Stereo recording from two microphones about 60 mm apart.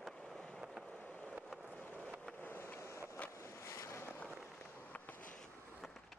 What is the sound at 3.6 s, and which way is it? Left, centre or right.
Boat, left.